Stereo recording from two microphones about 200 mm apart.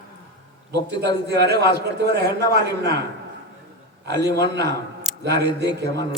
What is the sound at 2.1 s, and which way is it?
Speech, 55° right (ahead or behind).